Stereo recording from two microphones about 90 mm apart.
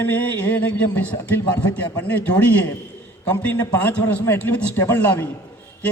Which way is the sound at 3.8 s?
20° left (ahead or behind).